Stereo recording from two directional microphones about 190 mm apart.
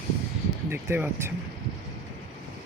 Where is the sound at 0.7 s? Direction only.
10° right (ahead or behind).